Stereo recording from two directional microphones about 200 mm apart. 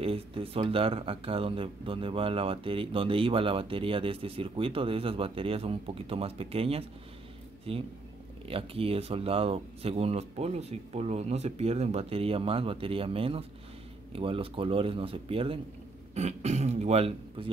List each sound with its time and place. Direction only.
0.0 s speech: 30° right (ahead or behind)